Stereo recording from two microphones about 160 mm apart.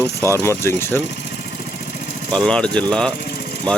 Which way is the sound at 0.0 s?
15° left (ahead or behind).